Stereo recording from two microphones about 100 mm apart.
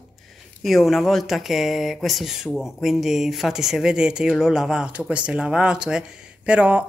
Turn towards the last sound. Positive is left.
turn(degrees=-10)  # may be behind; listen again after turning